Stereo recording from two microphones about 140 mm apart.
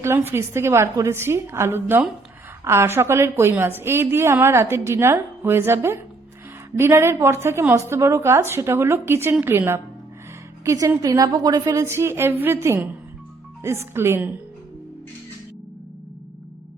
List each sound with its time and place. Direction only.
0.0 s a woman's voice: 15° right (ahead or behind)